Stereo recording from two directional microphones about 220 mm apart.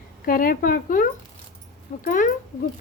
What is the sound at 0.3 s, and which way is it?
Speech, 40° left (ahead or behind).